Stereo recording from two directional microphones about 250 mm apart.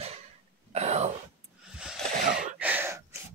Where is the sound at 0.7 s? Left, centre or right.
Right.